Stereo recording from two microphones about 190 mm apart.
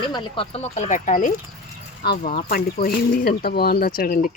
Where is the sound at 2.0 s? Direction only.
55° left (ahead or behind).